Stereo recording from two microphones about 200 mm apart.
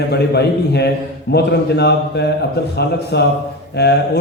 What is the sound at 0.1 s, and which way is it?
A man's voice, 55° left (ahead or behind).